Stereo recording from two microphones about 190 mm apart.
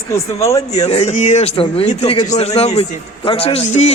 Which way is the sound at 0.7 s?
35° left (ahead or behind).